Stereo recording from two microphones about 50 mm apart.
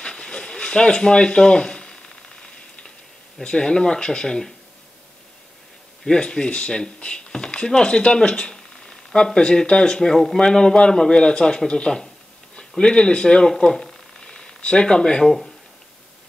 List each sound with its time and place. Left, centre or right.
0.0 s a sound: centre
3.4 s speech: centre
6.0 s speech: centre
15.2 s speech: centre